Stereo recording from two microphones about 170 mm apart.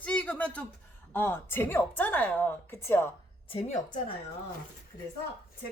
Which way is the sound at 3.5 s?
35° left (ahead or behind).